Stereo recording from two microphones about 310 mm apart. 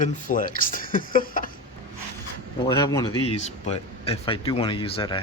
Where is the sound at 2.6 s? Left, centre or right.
Centre.